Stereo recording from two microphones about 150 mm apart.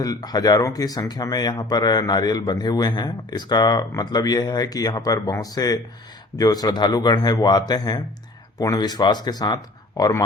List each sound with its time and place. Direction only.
0.0 s speech: 25° left (ahead or behind)